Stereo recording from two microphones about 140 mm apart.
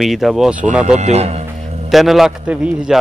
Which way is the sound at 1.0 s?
50° right (ahead or behind).